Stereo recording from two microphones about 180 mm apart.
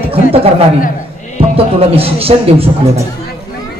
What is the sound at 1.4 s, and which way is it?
Music, 30° right (ahead or behind).